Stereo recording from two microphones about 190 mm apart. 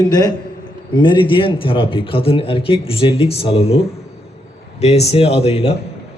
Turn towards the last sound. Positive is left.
turn(degrees=30)  # may be behind; listen again after turning